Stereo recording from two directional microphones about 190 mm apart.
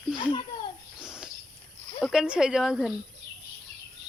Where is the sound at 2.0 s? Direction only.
Centre (ahead or behind).